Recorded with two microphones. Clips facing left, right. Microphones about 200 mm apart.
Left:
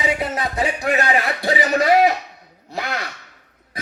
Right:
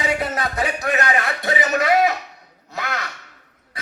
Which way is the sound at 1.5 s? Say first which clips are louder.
Left 2 dB; 30° left (ahead or behind).